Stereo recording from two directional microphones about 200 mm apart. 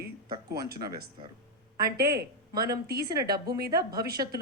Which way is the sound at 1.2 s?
25° right (ahead or behind).